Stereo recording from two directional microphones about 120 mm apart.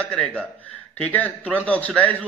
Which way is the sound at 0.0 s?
10° left (ahead or behind).